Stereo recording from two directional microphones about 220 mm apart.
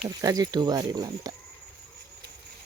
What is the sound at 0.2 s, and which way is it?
Speech, 15° right (ahead or behind).